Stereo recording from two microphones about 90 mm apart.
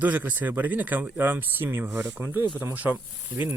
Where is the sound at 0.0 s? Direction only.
20° right (ahead or behind).